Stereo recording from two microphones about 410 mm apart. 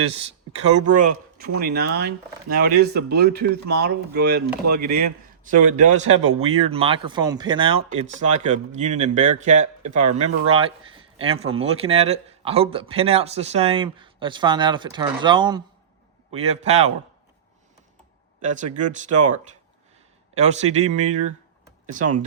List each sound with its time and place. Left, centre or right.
0.9 s speech: right
18.4 s speech: centre
20.3 s speech: centre